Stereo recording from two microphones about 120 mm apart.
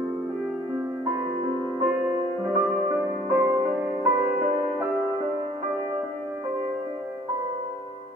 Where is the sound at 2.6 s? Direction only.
5° right (ahead or behind).